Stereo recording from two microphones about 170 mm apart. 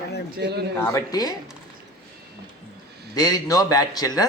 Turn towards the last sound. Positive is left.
turn(degrees=20)  # may be behind; listen again after turning